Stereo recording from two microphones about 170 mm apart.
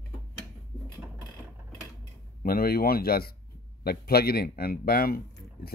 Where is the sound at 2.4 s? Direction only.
60° left (ahead or behind).